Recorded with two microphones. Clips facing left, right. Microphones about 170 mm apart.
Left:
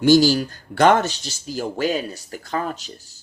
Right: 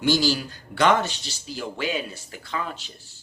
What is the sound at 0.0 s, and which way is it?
A man's voice, 45° left (ahead or behind).